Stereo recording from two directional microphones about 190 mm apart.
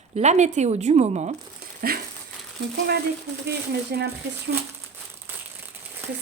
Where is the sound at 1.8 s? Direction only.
50° right (ahead or behind).